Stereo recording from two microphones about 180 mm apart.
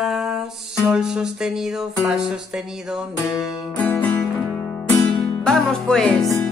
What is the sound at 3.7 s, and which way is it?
Music, 10° left (ahead or behind).